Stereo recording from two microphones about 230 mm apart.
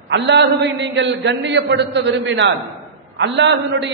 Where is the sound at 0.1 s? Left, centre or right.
Right.